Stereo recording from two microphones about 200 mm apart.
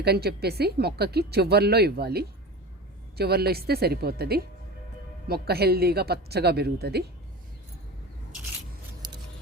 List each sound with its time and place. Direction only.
0.0 s speech: 55° right (ahead or behind)
9.0 s scissors: 20° right (ahead or behind)